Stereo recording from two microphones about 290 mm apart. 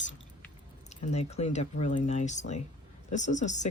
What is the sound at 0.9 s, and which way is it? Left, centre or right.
Speech, left.